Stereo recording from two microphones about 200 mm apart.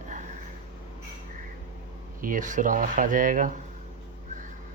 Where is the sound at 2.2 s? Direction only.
40° right (ahead or behind).